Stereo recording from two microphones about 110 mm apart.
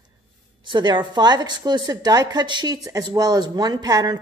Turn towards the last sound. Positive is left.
turn(degrees=-35)  # may be behind; listen again after turning